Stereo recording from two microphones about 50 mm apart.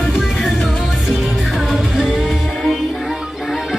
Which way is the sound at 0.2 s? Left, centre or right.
Centre.